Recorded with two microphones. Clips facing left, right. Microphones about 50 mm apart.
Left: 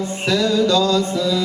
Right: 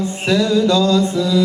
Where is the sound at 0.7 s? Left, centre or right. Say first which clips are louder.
Right 2 dB; right.